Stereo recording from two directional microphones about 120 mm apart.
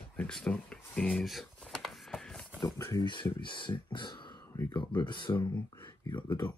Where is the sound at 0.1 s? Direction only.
10° left (ahead or behind).